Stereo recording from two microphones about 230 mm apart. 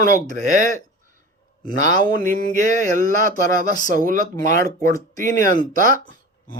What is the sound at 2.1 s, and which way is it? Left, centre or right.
Speech, right.